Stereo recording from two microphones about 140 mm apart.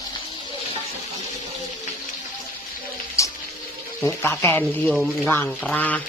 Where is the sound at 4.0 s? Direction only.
15° left (ahead or behind).